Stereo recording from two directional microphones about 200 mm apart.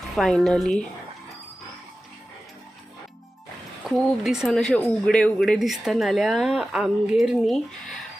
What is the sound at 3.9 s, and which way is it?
Speech, centre (ahead or behind).